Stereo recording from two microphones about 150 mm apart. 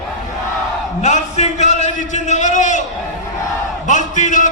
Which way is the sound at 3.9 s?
55° left (ahead or behind).